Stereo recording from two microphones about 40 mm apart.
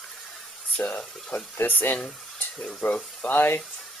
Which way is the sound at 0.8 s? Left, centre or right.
Left.